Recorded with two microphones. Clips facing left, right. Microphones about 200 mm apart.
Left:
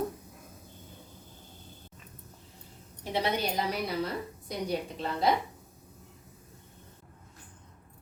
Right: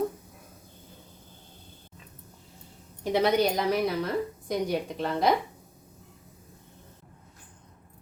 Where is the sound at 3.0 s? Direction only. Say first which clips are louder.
Right 7 dB; 50° right (ahead or behind).